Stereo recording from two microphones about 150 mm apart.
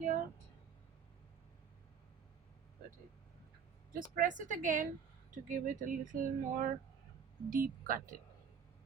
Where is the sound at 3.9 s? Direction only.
70° right (ahead or behind).